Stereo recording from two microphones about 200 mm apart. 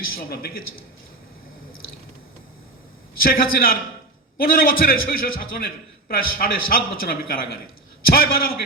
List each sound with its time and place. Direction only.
0.0 s a man's voice: 50° left (ahead or behind)
3.2 s a man's voice: 45° left (ahead or behind)